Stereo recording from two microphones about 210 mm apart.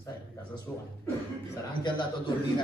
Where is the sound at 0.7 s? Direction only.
10° left (ahead or behind).